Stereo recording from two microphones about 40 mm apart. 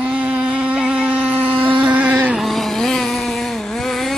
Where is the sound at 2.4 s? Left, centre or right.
Centre.